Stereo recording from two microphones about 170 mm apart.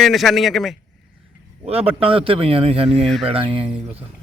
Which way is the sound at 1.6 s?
35° right (ahead or behind).